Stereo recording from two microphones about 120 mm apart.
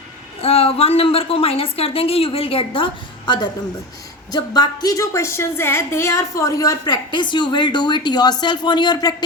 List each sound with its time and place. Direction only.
0.4 s a woman's voice: 55° left (ahead or behind); by 9.1 s 35° left (ahead or behind)